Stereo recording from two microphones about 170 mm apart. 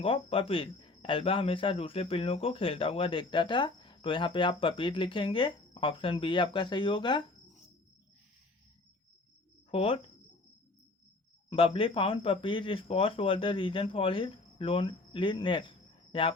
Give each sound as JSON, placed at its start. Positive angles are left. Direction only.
{"t": 0.0, "sound": "speech", "side_deg": 35}
{"t": 9.7, "sound": "speech", "side_deg": 35}
{"t": 11.4, "sound": "speech", "side_deg": 35}